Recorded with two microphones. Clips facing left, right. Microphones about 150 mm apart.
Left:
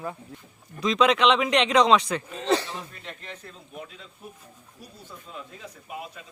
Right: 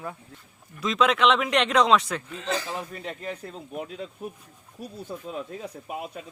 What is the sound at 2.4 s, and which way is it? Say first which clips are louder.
Speech: left 7 dB; 35° left (ahead or behind).